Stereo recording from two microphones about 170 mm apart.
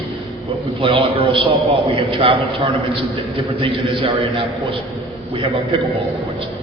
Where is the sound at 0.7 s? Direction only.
35° right (ahead or behind).